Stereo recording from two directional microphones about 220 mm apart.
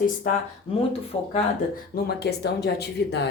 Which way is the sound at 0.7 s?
25° left (ahead or behind).